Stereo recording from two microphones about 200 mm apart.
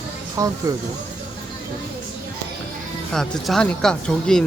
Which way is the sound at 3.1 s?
Centre (ahead or behind).